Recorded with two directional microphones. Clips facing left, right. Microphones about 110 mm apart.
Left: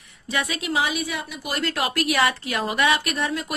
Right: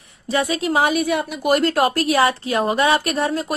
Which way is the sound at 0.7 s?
50° right (ahead or behind).